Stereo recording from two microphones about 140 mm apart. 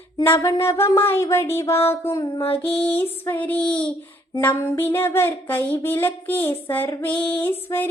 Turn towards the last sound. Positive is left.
turn(degrees=15)  # may be behind; listen again after turning